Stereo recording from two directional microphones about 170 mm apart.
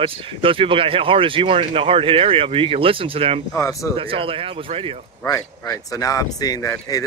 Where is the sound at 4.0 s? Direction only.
30° right (ahead or behind).